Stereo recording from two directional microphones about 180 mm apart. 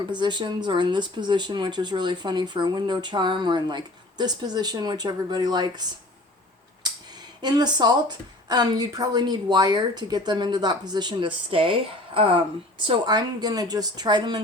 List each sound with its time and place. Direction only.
0.1 s speech: 25° right (ahead or behind)
7.4 s speech: 25° right (ahead or behind)